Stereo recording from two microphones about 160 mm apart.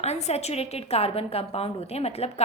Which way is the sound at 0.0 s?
45° left (ahead or behind).